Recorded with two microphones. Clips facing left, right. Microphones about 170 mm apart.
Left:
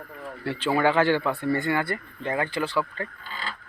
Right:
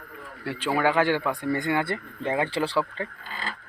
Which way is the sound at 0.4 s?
10° right (ahead or behind).